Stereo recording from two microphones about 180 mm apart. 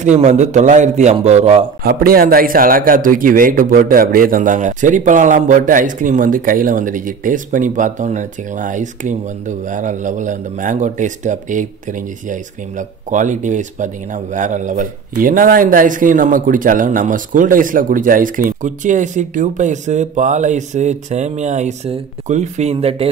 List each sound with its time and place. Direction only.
0.0 s a man's voice: 40° right (ahead or behind)
1.8 s speech: 55° right (ahead or behind); by 23.0 s 35° right (ahead or behind)